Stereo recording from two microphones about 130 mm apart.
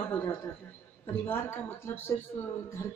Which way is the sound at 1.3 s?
20° left (ahead or behind).